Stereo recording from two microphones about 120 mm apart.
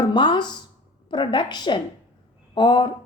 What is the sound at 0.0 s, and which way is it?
A woman's voice, 40° left (ahead or behind).